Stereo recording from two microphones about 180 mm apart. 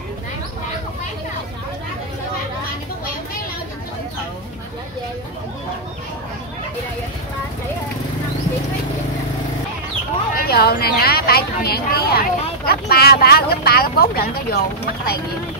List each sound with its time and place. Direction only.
10.3 s a woman's voice: 60° left (ahead or behind)